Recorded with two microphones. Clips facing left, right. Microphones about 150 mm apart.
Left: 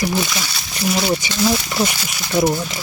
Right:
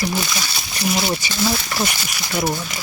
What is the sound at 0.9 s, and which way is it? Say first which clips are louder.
Speech: left 3 dB; centre (ahead or behind).